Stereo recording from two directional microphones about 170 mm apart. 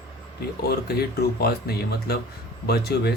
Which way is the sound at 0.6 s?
65° left (ahead or behind).